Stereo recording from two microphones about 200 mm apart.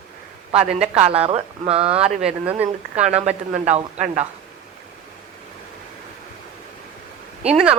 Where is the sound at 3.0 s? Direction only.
35° right (ahead or behind).